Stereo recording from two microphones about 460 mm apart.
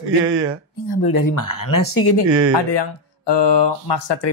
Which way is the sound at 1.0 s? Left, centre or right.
Left.